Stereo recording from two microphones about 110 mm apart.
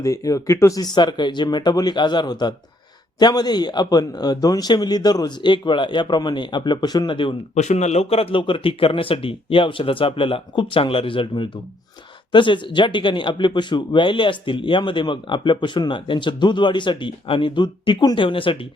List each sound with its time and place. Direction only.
0.0 s a man's voice: 30° left (ahead or behind); by 7.3 s 50° left (ahead or behind)
7.5 s speech: 90° left; by 18.5 s 50° left (ahead or behind)